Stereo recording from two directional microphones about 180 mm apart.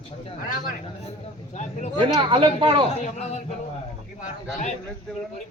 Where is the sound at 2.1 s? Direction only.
25° right (ahead or behind).